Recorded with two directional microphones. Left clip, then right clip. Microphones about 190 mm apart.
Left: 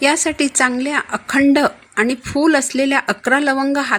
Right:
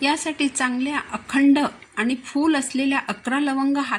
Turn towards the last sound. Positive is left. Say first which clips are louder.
# left 6 dB
turn(degrees=45)  # may be behind; listen again after turning